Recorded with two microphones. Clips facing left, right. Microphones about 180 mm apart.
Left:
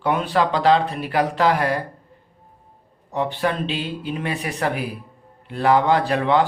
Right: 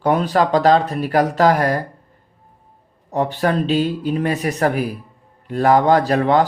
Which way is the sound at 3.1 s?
40° right (ahead or behind).